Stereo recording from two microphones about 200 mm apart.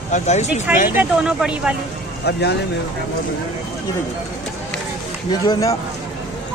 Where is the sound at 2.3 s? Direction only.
55° left (ahead or behind).